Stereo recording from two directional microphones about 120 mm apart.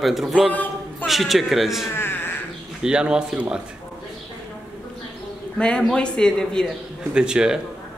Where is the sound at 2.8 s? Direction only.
5° right (ahead or behind).